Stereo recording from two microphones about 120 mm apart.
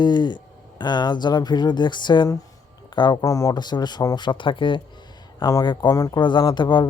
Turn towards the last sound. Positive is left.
turn(degrees=40)  # may be behind; listen again after turning